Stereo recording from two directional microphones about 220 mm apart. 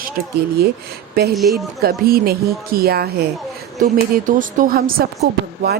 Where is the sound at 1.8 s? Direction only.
45° right (ahead or behind).